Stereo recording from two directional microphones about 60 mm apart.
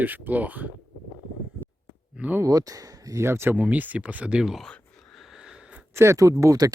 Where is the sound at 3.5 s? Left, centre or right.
Right.